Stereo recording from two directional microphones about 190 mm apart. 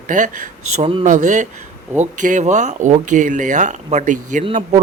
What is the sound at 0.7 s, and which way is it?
Speech, 30° right (ahead or behind).